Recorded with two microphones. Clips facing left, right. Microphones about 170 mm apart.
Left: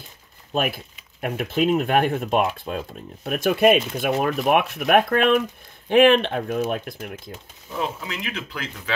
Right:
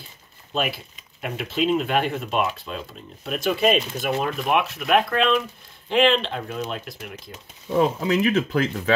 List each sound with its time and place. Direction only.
1.2 s speech: 50° left (ahead or behind)
7.7 s speech: 40° right (ahead or behind)